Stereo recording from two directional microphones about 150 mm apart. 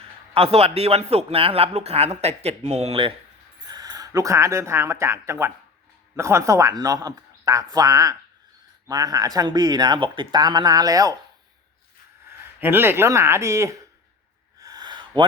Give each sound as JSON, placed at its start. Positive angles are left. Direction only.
{"t": 0.3, "sound": "speech", "side_deg": -40}
{"t": 3.7, "sound": "speech", "side_deg": -25}
{"t": 12.5, "sound": "speech", "side_deg": -15}
{"t": 14.6, "sound": "a sound", "side_deg": -25}